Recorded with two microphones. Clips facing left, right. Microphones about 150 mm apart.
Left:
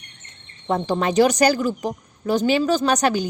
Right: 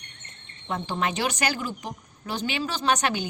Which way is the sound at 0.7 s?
40° left (ahead or behind).